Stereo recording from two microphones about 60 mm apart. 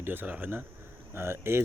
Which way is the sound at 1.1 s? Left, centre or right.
Right.